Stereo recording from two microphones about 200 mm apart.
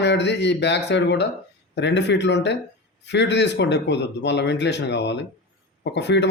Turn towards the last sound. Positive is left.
turn(degrees=60)  # may be behind; listen again after turning